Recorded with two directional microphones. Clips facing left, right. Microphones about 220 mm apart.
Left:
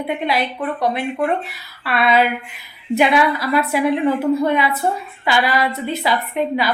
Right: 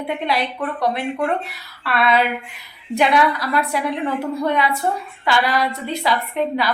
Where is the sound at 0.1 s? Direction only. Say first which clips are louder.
Left 1 dB; centre (ahead or behind).